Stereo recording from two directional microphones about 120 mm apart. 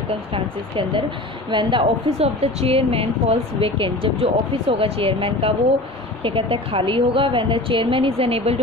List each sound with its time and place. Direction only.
0.3 s a woman's voice: 45° right (ahead or behind)